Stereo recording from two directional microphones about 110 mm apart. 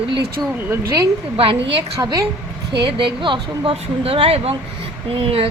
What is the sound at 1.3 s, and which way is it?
Speech, 55° right (ahead or behind).